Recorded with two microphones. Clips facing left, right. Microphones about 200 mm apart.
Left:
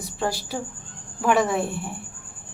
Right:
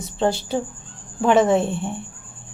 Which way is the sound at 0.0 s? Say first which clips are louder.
Right 6 dB; 25° right (ahead or behind).